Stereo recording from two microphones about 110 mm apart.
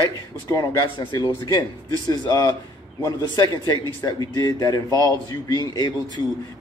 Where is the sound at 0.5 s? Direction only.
30° left (ahead or behind).